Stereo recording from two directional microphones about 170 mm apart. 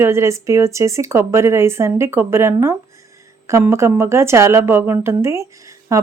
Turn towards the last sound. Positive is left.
turn(degrees=-20)  # may be behind; listen again after turning